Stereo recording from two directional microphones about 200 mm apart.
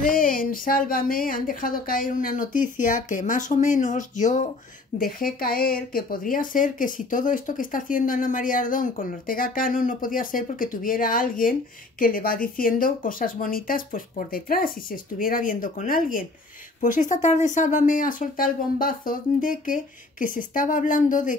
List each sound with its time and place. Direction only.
0.0 s speech: 45° left (ahead or behind)